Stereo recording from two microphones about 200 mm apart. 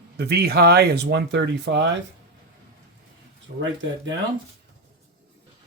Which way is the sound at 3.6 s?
65° right (ahead or behind).